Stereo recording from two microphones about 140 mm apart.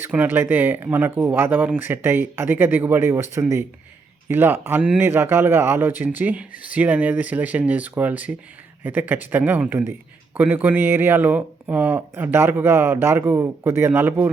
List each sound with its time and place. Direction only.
0.0 s a man's voice: 15° right (ahead or behind)